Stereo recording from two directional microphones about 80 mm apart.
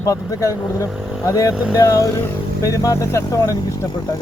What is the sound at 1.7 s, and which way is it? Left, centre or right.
Speech, left.